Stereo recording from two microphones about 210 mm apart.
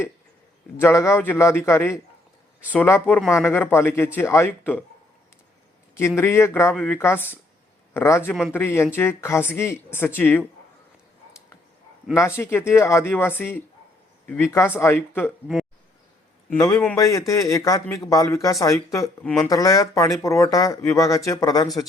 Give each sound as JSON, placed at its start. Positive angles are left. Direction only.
{"t": 0.8, "sound": "speech", "side_deg": 15}
{"t": 6.1, "sound": "speech", "side_deg": 10}
{"t": 8.3, "sound": "speech", "side_deg": 0}
{"t": 8.5, "sound": "speech", "side_deg": 10}
{"t": 12.4, "sound": "speech", "side_deg": 10}
{"t": 16.5, "sound": "speech", "side_deg": 10}
{"t": 19.2, "sound": "speech", "side_deg": 5}
{"t": 19.5, "sound": "speech", "side_deg": 15}